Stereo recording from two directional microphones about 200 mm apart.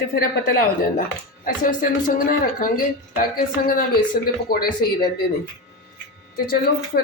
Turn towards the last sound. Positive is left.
turn(degrees=45)  # may be behind; listen again after turning